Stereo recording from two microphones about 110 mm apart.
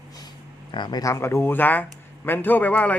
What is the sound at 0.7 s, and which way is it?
A man's voice, 40° left (ahead or behind).